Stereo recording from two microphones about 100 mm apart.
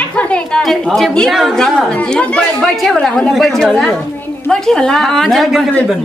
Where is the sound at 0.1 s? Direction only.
10° left (ahead or behind).